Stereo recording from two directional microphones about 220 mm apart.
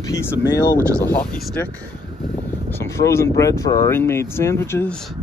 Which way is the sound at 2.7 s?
10° left (ahead or behind).